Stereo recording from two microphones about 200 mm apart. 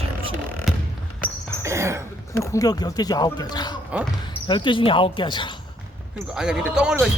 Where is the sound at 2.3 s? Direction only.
15° left (ahead or behind).